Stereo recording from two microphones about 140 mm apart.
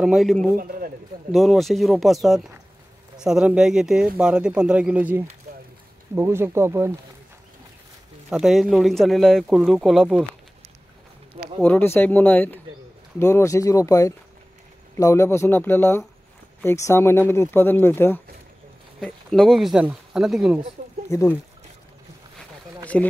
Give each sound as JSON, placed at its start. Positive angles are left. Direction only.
{"t": 0.0, "sound": "speech", "side_deg": 0}
{"t": 0.6, "sound": "a sound", "side_deg": -90}
{"t": 1.3, "sound": "speech", "side_deg": 0}
{"t": 8.3, "sound": "speech", "side_deg": -5}
{"t": 11.6, "sound": "speech", "side_deg": 15}
{"t": 19.0, "sound": "speech", "side_deg": 5}
{"t": 20.8, "sound": "a sound", "side_deg": -60}
{"t": 21.1, "sound": "speech", "side_deg": 20}
{"t": 22.9, "sound": "speech", "side_deg": 5}